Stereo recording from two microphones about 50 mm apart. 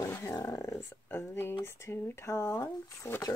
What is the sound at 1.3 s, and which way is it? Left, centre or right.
Speech, left.